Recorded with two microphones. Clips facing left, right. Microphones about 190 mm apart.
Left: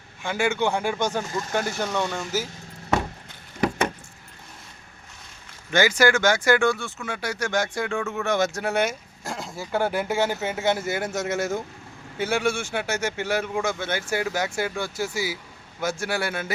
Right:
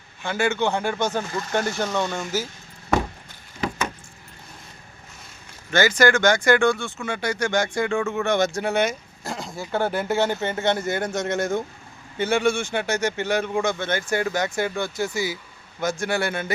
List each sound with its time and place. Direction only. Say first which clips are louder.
0.2 s speech: right 1 dB; 10° left (ahead or behind)
1.2 s speech: even; 45° left (ahead or behind)
1.5 s speech: right 2 dB; 5° left (ahead or behind)
5.7 s speech: right 1 dB; 10° left (ahead or behind)